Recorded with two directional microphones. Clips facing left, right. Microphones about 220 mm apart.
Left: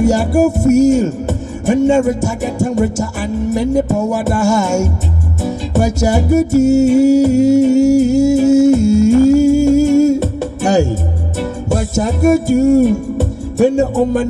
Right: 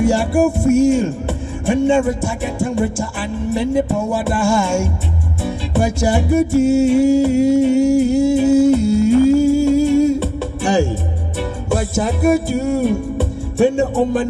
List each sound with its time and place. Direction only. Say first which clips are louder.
0.0 s music: left 3 dB; 40° left (ahead or behind)